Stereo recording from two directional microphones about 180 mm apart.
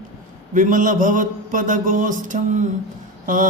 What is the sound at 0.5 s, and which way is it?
Mantra, 45° right (ahead or behind).